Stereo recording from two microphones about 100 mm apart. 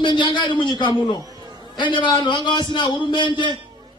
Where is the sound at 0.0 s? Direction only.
50° left (ahead or behind).